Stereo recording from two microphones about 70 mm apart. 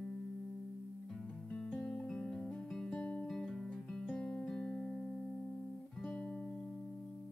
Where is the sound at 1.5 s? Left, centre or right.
Centre.